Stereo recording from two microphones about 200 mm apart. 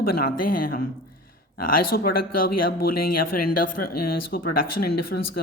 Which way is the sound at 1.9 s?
50° left (ahead or behind).